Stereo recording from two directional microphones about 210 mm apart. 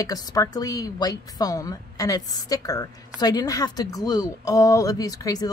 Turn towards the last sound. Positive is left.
turn(degrees=15)  # may be behind; listen again after turning